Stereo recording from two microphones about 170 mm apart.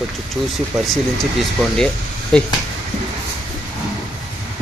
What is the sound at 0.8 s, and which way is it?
Speech, centre (ahead or behind).